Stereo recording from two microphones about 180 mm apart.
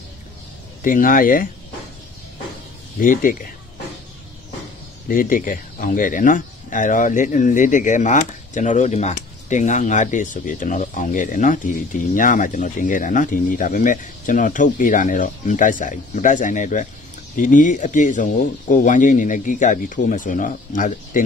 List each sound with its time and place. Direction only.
0.8 s speech: 50° left (ahead or behind)
3.0 s speech: 50° left (ahead or behind)
5.0 s speech: 50° left (ahead or behind)